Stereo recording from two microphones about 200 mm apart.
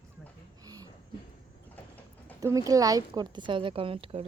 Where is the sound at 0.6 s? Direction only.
20° right (ahead or behind).